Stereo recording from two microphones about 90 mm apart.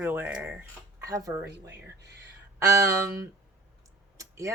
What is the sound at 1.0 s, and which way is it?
Speech, 40° right (ahead or behind).